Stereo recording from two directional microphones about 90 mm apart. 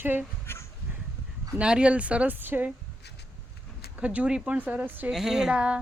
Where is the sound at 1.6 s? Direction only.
10° right (ahead or behind).